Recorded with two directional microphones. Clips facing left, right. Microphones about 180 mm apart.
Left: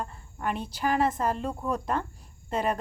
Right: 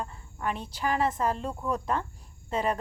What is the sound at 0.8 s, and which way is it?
A woman's voice, 45° left (ahead or behind).